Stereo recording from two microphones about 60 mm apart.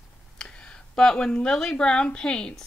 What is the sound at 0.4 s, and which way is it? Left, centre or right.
Speech, centre.